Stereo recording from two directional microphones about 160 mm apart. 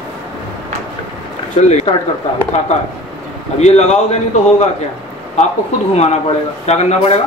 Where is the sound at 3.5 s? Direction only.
45° left (ahead or behind).